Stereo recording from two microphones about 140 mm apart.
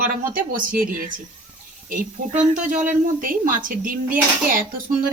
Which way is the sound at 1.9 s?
65° right (ahead or behind).